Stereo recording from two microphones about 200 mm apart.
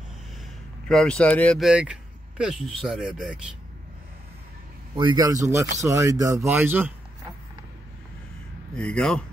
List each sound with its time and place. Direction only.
0.8 s speech: 5° left (ahead or behind)
4.9 s speech: 20° right (ahead or behind)
8.7 s speech: 5° left (ahead or behind)